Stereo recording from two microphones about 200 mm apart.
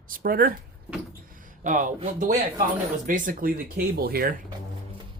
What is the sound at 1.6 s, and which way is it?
Speech, 40° right (ahead or behind).